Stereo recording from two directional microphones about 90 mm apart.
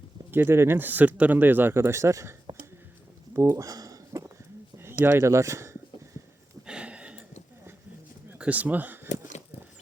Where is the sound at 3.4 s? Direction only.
35° right (ahead or behind).